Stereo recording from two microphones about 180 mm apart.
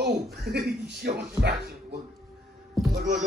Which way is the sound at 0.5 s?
65° right (ahead or behind).